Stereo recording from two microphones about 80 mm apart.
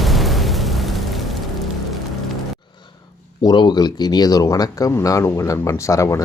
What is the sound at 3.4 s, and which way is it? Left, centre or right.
Speech, left.